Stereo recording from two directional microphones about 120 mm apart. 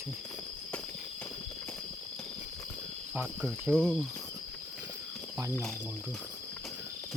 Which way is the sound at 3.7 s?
5° left (ahead or behind).